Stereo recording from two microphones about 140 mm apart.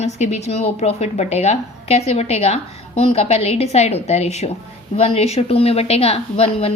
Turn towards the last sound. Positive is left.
turn(degrees=45)  # may be behind; listen again after turning